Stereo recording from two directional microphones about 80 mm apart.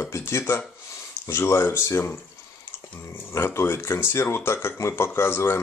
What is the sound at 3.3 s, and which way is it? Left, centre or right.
Speech, left.